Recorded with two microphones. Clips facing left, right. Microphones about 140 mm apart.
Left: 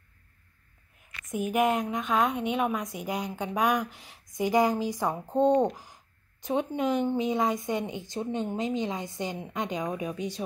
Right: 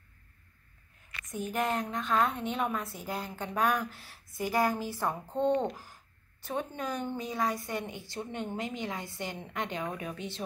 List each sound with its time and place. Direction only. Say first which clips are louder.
1.4 s speech: left 6 dB; 15° left (ahead or behind)